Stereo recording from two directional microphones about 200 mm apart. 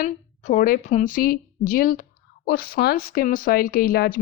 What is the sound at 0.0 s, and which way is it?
A woman's voice, 40° left (ahead or behind).